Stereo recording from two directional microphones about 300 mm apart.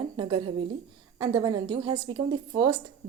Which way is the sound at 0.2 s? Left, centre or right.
Centre.